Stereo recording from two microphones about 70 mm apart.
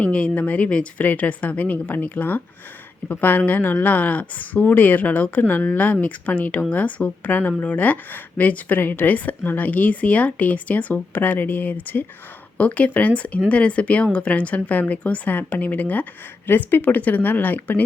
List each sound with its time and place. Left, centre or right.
0.0 s speech: centre